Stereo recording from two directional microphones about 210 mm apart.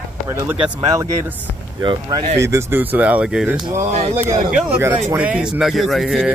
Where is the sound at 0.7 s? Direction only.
20° right (ahead or behind).